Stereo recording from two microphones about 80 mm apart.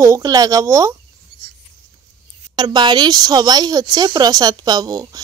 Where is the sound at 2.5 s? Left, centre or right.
Right.